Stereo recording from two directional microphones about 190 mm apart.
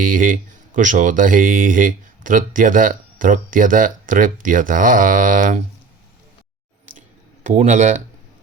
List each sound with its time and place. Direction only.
0.0 s speech: 45° right (ahead or behind)
7.4 s speech: 40° right (ahead or behind)